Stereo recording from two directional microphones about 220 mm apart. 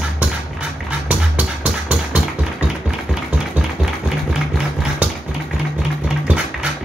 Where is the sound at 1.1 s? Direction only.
5° right (ahead or behind).